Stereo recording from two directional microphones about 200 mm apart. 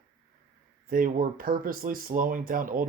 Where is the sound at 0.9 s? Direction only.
45° right (ahead or behind).